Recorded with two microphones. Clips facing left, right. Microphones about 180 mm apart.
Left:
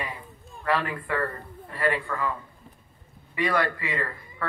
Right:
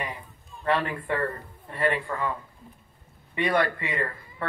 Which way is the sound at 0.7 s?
25° right (ahead or behind).